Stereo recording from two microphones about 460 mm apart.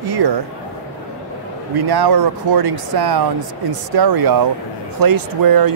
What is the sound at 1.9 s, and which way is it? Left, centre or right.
Speech, right.